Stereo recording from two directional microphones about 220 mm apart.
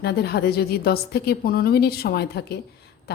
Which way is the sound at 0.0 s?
45° left (ahead or behind).